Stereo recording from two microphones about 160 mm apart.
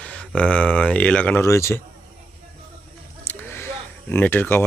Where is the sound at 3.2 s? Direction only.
15° left (ahead or behind).